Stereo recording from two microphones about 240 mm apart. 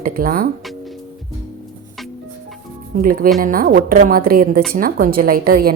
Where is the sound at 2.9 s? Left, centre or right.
Right.